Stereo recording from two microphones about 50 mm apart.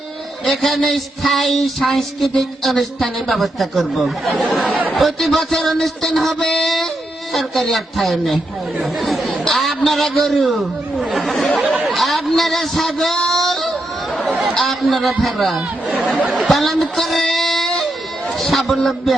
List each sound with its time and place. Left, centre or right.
0.4 s speech: centre
9.0 s chatter: centre
9.6 s a man's voice: centre
11.6 s chatter: right
11.9 s speech: centre
13.3 s child singing: centre
14.4 s speech: centre
16.0 s speech: right
16.5 s speech: centre